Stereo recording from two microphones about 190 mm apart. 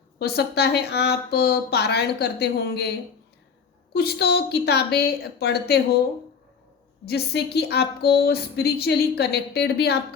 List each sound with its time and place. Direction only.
0.2 s a woman's voice: 60° left (ahead or behind)
3.9 s a woman's voice: 55° left (ahead or behind)
7.0 s a woman's voice: 60° left (ahead or behind)